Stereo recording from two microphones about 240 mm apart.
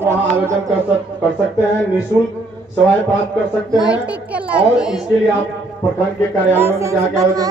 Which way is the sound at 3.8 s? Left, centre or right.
Centre.